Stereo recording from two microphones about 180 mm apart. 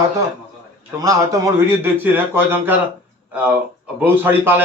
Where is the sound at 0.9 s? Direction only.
20° right (ahead or behind).